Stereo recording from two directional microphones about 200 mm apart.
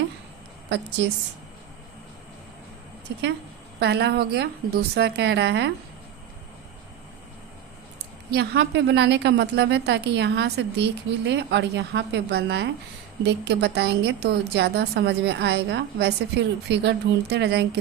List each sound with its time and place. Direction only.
3.1 s a woman's voice: 60° right (ahead or behind)
8.3 s a woman's voice: 60° right (ahead or behind)